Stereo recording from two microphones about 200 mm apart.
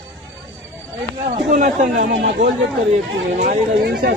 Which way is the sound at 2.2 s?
65° right (ahead or behind).